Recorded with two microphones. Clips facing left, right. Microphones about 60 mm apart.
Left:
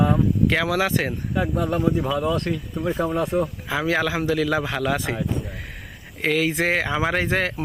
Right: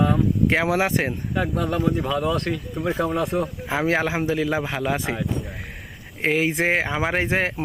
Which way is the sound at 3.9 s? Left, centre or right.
Right.